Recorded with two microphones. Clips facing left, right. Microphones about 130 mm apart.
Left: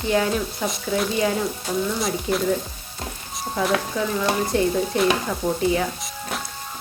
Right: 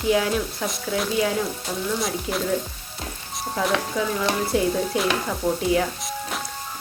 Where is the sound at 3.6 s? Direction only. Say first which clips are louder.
Left 1 dB; centre (ahead or behind).